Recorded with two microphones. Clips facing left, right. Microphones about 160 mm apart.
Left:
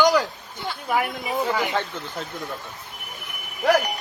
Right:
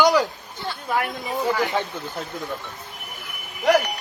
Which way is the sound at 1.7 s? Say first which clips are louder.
Right 1 dB; 10° right (ahead or behind).